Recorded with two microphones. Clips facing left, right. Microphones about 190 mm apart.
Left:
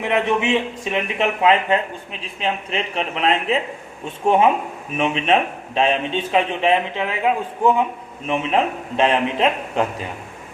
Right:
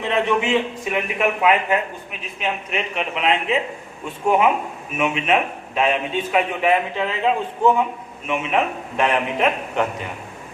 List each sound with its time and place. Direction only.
0.0 s a man's voice: 20° left (ahead or behind); by 3.3 s 35° left (ahead or behind)
4.9 s a man's voice: 30° left (ahead or behind); by 7.9 s 15° left (ahead or behind)
8.3 s a man's voice: 30° left (ahead or behind)